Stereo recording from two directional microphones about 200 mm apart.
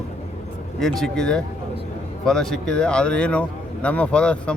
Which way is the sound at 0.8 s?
Centre (ahead or behind).